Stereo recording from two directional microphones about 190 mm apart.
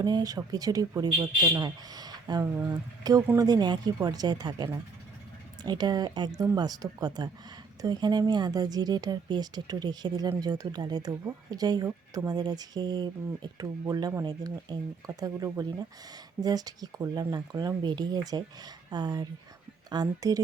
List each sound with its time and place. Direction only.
0.0 s speech: 20° right (ahead or behind)